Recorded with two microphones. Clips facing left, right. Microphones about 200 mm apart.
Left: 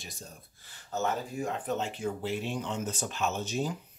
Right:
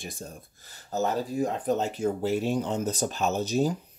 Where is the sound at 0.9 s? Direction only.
35° right (ahead or behind).